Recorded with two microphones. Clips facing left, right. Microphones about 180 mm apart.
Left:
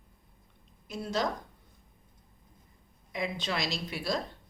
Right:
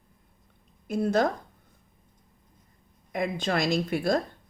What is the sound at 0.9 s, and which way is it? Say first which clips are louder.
Speech: right 8 dB; 55° right (ahead or behind).